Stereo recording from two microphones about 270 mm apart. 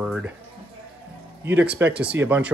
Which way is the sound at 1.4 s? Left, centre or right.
Centre.